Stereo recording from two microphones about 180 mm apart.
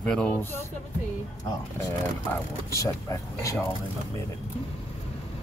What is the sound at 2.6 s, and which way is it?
Speech, 15° left (ahead or behind).